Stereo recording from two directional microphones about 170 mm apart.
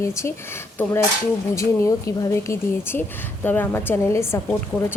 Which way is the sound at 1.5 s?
15° left (ahead or behind).